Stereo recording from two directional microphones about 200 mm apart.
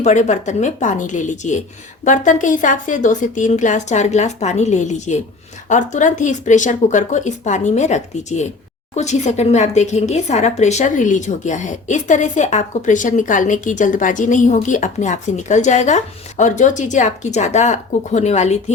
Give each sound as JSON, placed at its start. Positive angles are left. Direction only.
{"t": 0.0, "sound": "speech", "side_deg": 35}